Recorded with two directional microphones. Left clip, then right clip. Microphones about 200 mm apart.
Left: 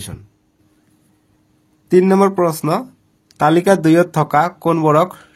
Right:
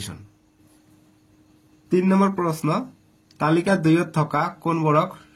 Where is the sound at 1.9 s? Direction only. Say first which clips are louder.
Left 8 dB; 45° left (ahead or behind).